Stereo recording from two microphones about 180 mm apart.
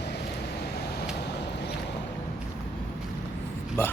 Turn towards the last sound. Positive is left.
turn(degrees=10)  # may be behind; listen again after turning